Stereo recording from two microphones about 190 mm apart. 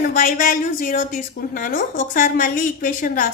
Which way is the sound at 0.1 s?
45° left (ahead or behind).